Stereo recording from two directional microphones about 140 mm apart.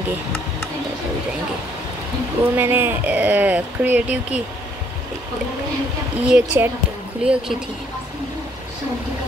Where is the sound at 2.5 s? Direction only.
15° right (ahead or behind).